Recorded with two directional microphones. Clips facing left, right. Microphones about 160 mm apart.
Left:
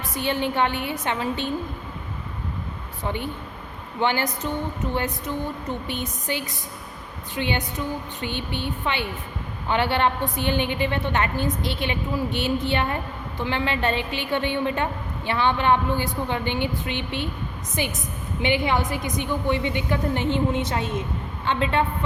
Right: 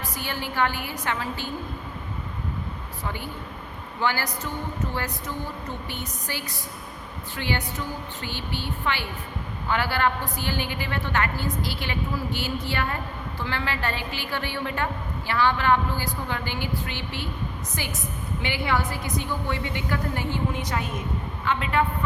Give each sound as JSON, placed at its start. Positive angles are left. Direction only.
{"t": 0.1, "sound": "a woman's voice", "side_deg": 20}
{"t": 3.0, "sound": "a woman's voice", "side_deg": 20}